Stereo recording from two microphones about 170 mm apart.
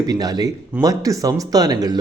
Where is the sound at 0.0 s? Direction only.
20° right (ahead or behind).